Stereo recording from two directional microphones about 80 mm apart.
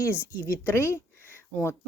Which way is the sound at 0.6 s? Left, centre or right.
Left.